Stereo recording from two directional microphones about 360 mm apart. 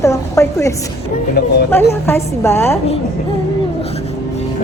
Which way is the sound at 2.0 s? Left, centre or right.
Centre.